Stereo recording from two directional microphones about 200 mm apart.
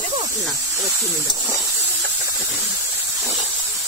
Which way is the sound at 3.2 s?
Centre (ahead or behind).